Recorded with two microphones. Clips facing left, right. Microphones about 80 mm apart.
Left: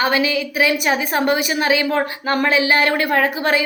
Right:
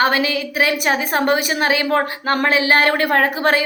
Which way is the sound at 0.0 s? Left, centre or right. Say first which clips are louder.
Right 1 dB; right.